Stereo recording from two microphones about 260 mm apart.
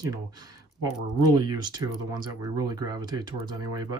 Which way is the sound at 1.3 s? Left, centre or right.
Centre.